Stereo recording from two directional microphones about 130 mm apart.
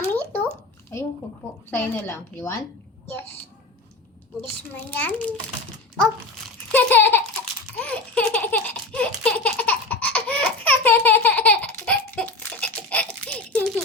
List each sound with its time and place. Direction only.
0.0 s a sound: 15° left (ahead or behind)
1.7 s a woman's voice: 15° left (ahead or behind)
4.7 s a woman's voice: 15° left (ahead or behind)
6.7 s a woman's voice: 15° left (ahead or behind)
7.8 s baby laughter: 10° left (ahead or behind)